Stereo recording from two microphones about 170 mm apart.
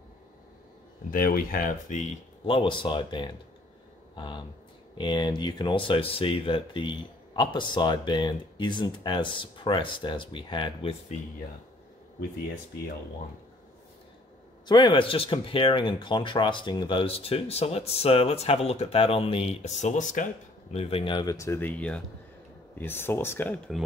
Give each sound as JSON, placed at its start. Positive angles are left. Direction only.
{"t": 1.1, "sound": "speech", "side_deg": 55}
{"t": 2.4, "sound": "speech", "side_deg": 30}
{"t": 14.7, "sound": "speech", "side_deg": 25}
{"t": 20.7, "sound": "speech", "side_deg": 35}